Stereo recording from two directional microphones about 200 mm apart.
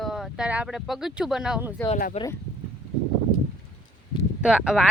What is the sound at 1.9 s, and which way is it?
Speech, 45° left (ahead or behind).